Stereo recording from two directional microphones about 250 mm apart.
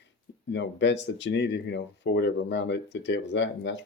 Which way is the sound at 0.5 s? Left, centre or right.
Left.